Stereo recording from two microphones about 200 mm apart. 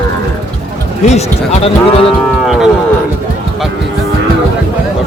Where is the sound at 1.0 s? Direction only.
35° left (ahead or behind).